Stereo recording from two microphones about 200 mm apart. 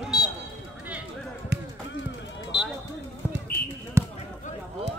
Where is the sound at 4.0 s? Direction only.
15° right (ahead or behind).